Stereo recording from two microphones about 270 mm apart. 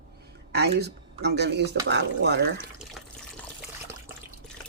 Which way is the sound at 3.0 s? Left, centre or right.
Centre.